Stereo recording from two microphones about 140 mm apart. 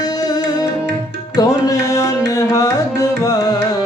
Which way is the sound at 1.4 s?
25° left (ahead or behind).